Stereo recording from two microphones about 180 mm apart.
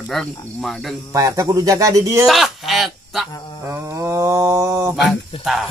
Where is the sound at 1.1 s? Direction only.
20° right (ahead or behind).